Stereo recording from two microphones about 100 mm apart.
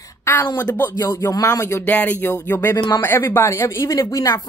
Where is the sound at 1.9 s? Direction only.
15° left (ahead or behind).